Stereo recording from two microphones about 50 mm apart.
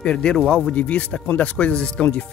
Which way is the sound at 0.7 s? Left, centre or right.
Left.